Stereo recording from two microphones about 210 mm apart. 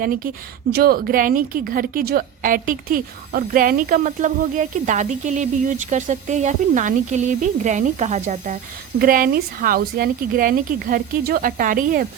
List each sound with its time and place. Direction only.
0.7 s a woman's voice: 45° right (ahead or behind)